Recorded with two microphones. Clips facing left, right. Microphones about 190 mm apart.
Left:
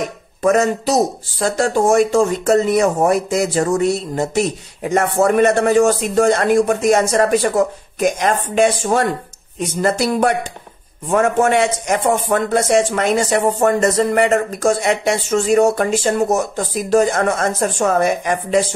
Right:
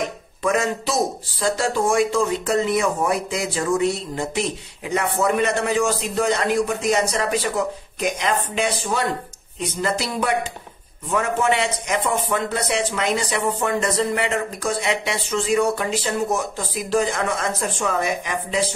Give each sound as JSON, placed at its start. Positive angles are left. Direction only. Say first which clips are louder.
{"t": 0.4, "sound": "speech", "louder": "left 7 dB", "side_deg": 40}